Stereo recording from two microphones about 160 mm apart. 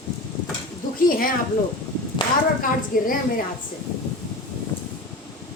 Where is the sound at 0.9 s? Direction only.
60° left (ahead or behind).